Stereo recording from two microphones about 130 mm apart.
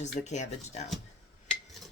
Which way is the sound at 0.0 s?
65° left (ahead or behind).